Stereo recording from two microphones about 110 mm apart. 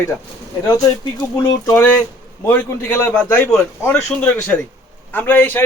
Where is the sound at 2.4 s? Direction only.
15° left (ahead or behind).